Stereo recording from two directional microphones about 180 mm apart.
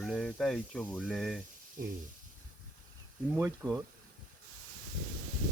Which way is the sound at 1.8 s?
50° right (ahead or behind).